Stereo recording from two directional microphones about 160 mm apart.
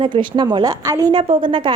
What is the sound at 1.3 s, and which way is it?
Speech, 30° right (ahead or behind).